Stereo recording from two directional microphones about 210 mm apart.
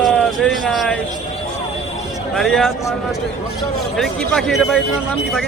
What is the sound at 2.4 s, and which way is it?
Speech, centre (ahead or behind).